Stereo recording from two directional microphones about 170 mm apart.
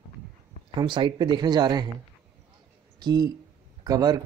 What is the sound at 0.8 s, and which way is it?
Speech, 30° right (ahead or behind).